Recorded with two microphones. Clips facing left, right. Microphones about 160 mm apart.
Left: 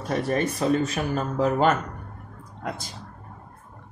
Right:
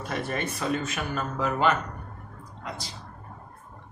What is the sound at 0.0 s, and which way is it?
Speech, 35° left (ahead or behind).